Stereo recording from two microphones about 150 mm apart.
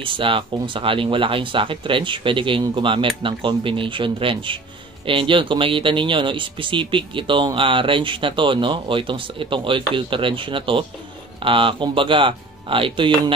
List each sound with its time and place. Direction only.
0.0 s speech: 35° right (ahead or behind)